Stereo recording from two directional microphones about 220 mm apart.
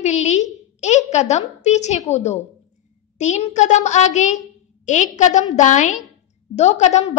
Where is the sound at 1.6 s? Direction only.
30° left (ahead or behind).